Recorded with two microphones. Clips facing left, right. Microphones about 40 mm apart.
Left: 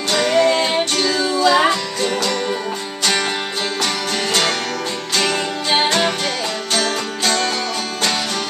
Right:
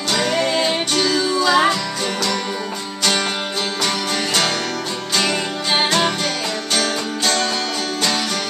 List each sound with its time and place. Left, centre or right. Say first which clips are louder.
0.1 s music: left 4 dB; centre
3.8 s music: even; centre